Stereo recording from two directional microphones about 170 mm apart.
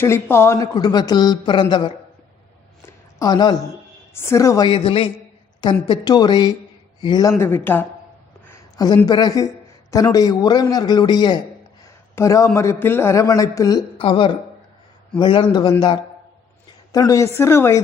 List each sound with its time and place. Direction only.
0.0 s speech: 15° left (ahead or behind)
2.8 s a sound: 20° left (ahead or behind)
4.1 s a man's voice: 15° left (ahead or behind)
8.4 s a sound: 20° left (ahead or behind)
9.0 s a man's voice: 25° left (ahead or behind)
16.9 s a man's voice: 20° left (ahead or behind)